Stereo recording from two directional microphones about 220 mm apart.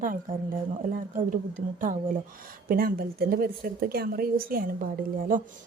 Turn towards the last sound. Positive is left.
turn(degrees=-40)  # may be behind; listen again after turning